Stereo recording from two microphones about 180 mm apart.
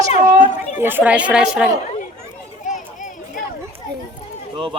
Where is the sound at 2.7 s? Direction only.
45° left (ahead or behind).